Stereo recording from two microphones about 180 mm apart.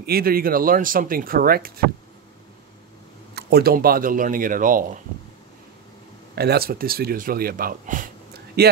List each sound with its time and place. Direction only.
0.0 s speech: 55° right (ahead or behind)
3.3 s speech: 60° right (ahead or behind)
6.3 s speech: 60° right (ahead or behind)
8.6 s speech: 60° right (ahead or behind)